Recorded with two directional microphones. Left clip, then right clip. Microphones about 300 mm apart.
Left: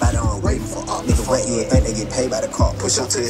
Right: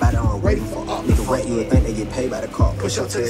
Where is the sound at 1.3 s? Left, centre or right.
Centre.